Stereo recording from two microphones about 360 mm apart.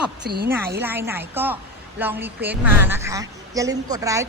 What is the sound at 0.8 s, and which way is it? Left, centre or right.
A woman's voice, centre.